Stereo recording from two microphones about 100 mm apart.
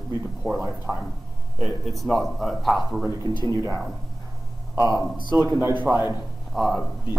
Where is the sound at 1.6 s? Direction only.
Centre (ahead or behind).